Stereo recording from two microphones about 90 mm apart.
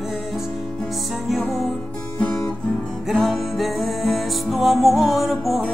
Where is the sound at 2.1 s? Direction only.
20° left (ahead or behind).